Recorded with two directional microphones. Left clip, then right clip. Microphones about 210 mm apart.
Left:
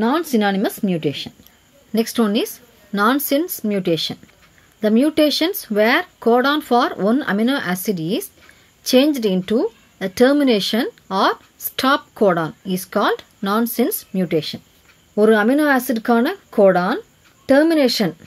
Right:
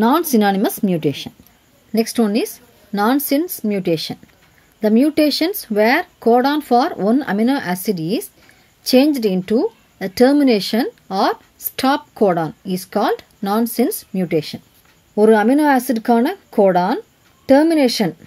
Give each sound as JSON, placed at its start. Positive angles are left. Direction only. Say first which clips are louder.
{"t": 0.0, "sound": "speech", "louder": "right 3 dB", "side_deg": -25}
{"t": 1.9, "sound": "speech", "louder": "right 1 dB", "side_deg": -5}